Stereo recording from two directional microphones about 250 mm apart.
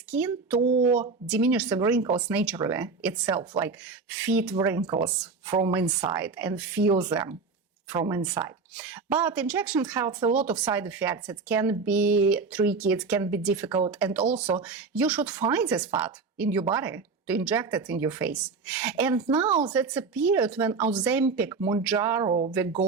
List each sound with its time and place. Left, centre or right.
0.1 s speech: centre
0.6 s speech: right
1.3 s speech: centre
7.1 s speech: centre
13.7 s speech: right
14.0 s speech: centre
22.3 s speech: right